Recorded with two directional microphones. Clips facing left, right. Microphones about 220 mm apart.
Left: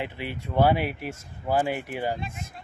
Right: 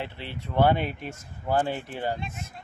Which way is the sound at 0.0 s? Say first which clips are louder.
Left 3 dB; 15° left (ahead or behind).